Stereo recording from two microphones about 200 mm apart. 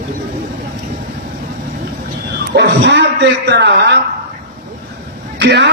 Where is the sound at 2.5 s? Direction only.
60° right (ahead or behind).